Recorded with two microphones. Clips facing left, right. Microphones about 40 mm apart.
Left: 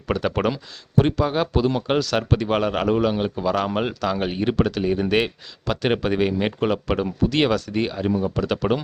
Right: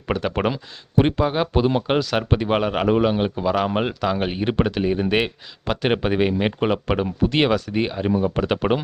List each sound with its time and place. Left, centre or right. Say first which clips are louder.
0.1 s speech: even; centre